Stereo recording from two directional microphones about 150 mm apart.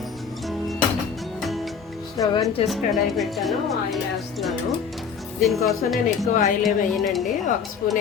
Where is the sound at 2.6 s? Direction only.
40° left (ahead or behind).